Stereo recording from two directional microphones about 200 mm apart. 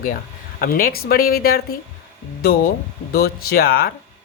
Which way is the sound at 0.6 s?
45° left (ahead or behind).